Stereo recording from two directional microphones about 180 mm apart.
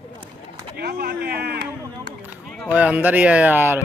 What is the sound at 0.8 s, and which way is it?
Speech, 60° right (ahead or behind).